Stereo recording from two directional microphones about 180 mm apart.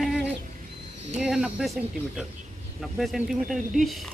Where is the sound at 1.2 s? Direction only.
5° right (ahead or behind).